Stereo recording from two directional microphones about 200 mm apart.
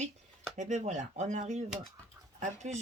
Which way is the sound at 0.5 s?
35° right (ahead or behind).